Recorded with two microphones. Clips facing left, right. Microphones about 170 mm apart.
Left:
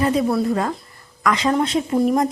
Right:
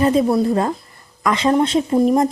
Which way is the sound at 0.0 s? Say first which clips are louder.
Right 3 dB; 25° right (ahead or behind).